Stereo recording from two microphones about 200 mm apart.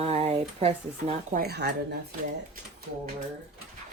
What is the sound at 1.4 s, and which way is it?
Speech, 55° right (ahead or behind).